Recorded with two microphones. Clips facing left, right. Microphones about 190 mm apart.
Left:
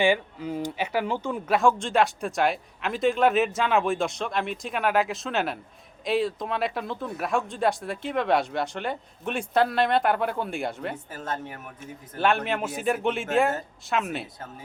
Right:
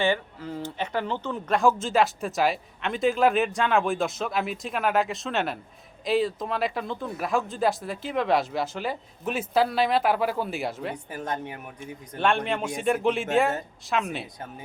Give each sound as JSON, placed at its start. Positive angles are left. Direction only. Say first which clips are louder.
{"t": 0.0, "sound": "speech", "louder": "left 2 dB", "side_deg": 15}
{"t": 11.1, "sound": "speech", "louder": "right 2 dB", "side_deg": -15}
{"t": 12.1, "sound": "speech", "louder": "even", "side_deg": 5}